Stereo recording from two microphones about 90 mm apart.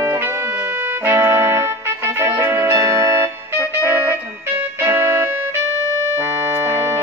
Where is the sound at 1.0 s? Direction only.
30° right (ahead or behind).